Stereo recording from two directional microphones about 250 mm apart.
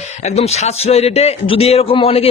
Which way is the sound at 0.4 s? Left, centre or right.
Left.